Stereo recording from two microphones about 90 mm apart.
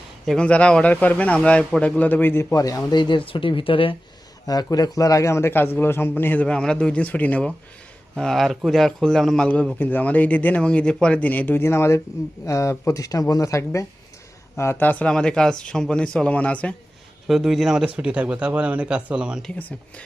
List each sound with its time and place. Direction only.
0.3 s a man's voice: 10° left (ahead or behind); by 2.8 s 40° left (ahead or behind)
2.9 s speech: 60° left (ahead or behind); by 3.9 s 80° left
4.4 s a man's voice: 45° left (ahead or behind); by 6.4 s 25° left (ahead or behind)
6.4 s a man's voice: 10° left (ahead or behind)
8.1 s a man's voice: 5° left (ahead or behind)
17.2 s speech: centre (ahead or behind)